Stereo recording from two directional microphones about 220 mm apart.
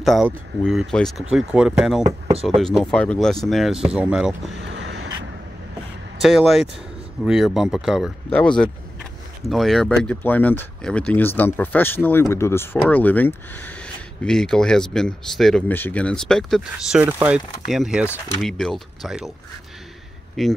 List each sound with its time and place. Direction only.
0.0 s speech: centre (ahead or behind)
4.6 s a sound: 55° right (ahead or behind)
6.2 s speech: centre (ahead or behind)
20.4 s speech: centre (ahead or behind)